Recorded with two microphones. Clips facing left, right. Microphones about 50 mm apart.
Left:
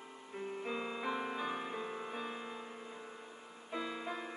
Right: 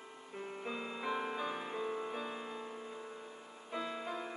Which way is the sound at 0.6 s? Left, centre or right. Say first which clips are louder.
Even; centre.